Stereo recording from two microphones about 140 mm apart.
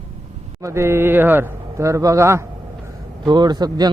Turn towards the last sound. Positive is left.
turn(degrees=-30)  # may be behind; listen again after turning